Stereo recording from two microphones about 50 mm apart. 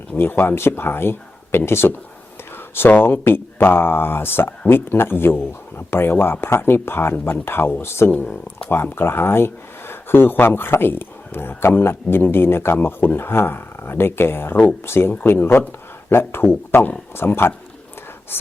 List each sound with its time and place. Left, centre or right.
0.2 s speech: left